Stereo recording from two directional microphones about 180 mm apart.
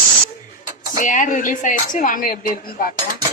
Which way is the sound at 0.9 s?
45° left (ahead or behind).